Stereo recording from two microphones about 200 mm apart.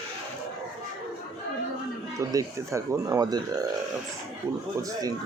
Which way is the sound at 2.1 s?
15° right (ahead or behind).